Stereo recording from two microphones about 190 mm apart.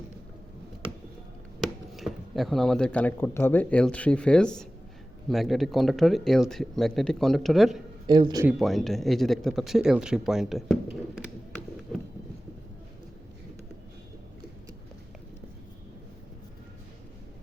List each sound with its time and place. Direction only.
1.6 s speech: centre (ahead or behind)
8.0 s speech: 20° right (ahead or behind)
8.4 s speech: centre (ahead or behind)